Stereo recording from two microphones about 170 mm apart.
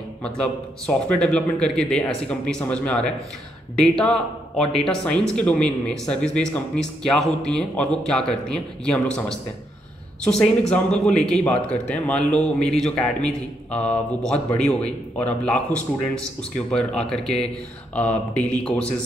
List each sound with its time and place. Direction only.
0.2 s speech: 5° left (ahead or behind)